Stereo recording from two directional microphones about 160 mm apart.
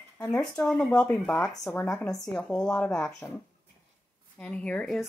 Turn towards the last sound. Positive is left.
turn(degrees=5)  # may be behind; listen again after turning